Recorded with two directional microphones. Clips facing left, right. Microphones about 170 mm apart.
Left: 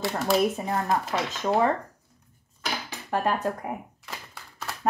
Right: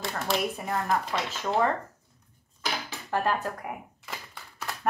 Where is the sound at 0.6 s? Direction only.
20° left (ahead or behind).